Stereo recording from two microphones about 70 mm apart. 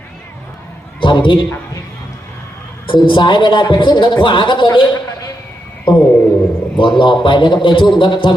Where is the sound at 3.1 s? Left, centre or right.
Left.